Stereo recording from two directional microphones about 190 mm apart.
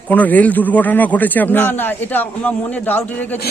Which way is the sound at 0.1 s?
10° left (ahead or behind).